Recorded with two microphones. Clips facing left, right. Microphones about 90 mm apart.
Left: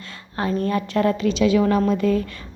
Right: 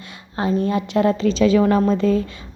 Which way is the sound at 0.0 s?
20° right (ahead or behind).